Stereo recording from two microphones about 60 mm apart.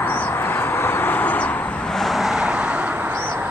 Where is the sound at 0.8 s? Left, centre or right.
Left.